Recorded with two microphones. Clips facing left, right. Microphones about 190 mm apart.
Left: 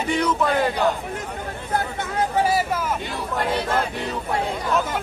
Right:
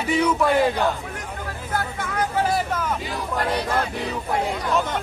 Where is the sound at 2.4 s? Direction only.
10° left (ahead or behind).